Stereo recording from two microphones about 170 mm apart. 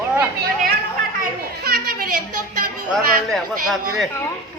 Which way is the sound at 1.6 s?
65° right (ahead or behind).